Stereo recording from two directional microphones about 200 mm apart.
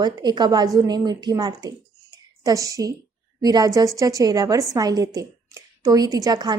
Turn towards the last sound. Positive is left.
turn(degrees=-20)  # may be behind; listen again after turning